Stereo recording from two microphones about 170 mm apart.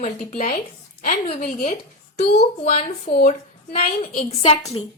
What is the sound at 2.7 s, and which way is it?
Speech, 55° left (ahead or behind).